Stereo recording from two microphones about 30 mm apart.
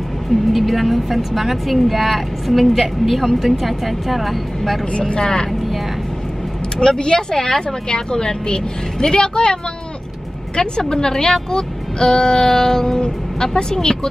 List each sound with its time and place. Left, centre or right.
0.5 s speech: centre
4.9 s speech: left
6.8 s speech: left